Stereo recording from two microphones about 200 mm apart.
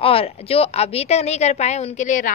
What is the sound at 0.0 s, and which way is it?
A woman's voice, 30° left (ahead or behind).